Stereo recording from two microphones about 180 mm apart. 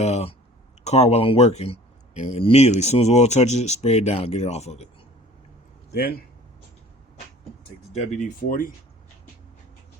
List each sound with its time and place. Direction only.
0.0 s speech: 35° left (ahead or behind)
5.9 s speech: 60° left (ahead or behind)
7.9 s speech: 40° left (ahead or behind)